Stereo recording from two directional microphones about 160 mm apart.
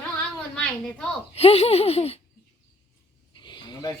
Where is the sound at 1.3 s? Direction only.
40° left (ahead or behind).